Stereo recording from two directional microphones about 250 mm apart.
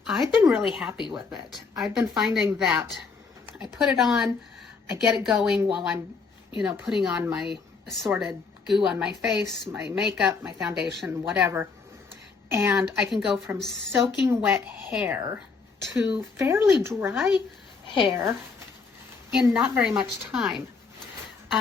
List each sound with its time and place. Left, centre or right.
0.0 s a woman's voice: centre
17.8 s a woman's voice: centre
18.1 s a woman's voice: centre